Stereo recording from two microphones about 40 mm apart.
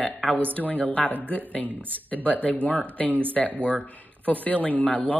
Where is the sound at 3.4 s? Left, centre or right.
Centre.